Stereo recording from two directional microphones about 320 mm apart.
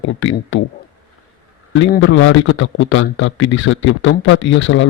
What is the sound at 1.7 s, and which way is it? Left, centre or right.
A man's voice, left.